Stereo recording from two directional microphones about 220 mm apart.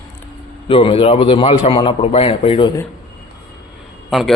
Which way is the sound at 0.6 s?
25° left (ahead or behind).